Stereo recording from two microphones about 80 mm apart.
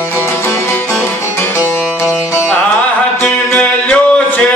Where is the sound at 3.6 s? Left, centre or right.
Centre.